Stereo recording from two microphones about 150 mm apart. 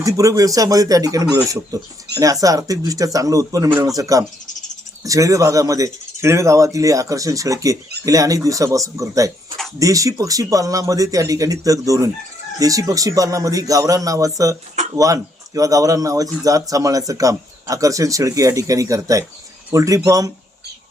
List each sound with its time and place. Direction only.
0.0 s speech: 20° right (ahead or behind)